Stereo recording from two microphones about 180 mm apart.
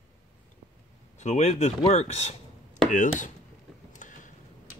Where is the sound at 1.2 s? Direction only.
40° left (ahead or behind).